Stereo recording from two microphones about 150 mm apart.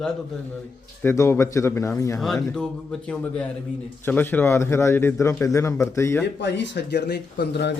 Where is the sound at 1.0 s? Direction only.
20° left (ahead or behind).